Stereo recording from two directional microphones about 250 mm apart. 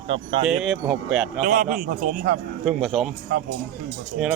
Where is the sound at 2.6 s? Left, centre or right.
Centre.